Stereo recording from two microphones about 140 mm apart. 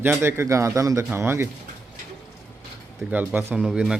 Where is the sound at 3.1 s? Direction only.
10° right (ahead or behind).